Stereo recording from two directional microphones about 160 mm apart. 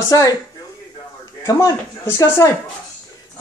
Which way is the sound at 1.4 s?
20° left (ahead or behind).